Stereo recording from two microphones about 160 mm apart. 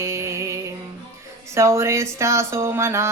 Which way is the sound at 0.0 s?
20° right (ahead or behind).